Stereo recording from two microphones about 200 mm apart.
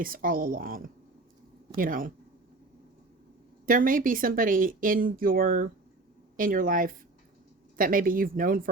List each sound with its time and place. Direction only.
0.0 s speech: 45° right (ahead or behind)
3.7 s speech: 45° right (ahead or behind)